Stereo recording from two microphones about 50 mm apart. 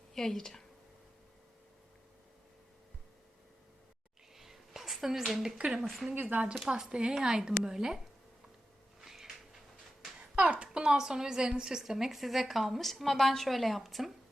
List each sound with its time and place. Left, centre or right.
0.1 s a woman's voice: centre
4.4 s a sound: centre
5.5 s speech: centre
5.8 s a woman's voice: centre
6.5 s a woman's voice: centre
9.0 s a sound: centre
10.4 s a woman's voice: centre